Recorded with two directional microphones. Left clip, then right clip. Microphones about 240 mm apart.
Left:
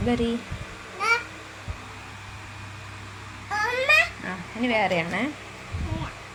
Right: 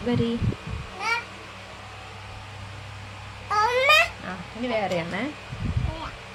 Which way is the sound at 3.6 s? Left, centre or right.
Right.